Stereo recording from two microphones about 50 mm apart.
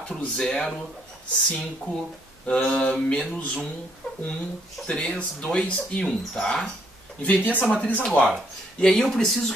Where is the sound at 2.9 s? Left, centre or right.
Left.